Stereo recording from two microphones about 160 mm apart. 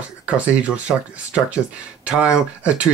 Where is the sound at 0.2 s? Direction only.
5° right (ahead or behind).